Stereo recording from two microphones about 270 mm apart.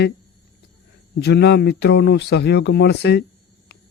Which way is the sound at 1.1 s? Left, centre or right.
Left.